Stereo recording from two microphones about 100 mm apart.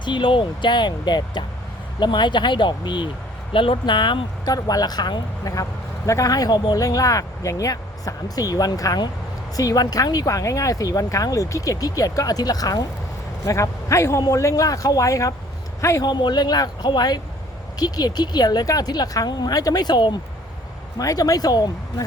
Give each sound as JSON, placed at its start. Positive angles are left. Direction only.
{"t": 0.0, "sound": "speech", "side_deg": 50}
{"t": 6.1, "sound": "a man's voice", "side_deg": 35}
{"t": 16.0, "sound": "speech", "side_deg": 45}
{"t": 21.0, "sound": "speech", "side_deg": 35}